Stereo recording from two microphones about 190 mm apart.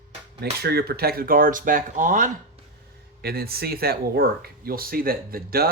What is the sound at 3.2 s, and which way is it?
Speech, 55° right (ahead or behind).